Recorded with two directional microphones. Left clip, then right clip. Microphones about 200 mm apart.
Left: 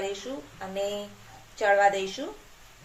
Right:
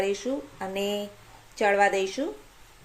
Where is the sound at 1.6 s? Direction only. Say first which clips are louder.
Even; 40° right (ahead or behind).